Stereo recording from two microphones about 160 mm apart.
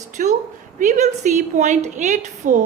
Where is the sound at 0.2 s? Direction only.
55° right (ahead or behind).